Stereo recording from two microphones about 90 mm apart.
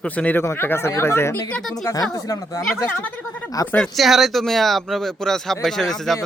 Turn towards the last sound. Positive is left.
turn(degrees=5)  # may be behind; listen again after turning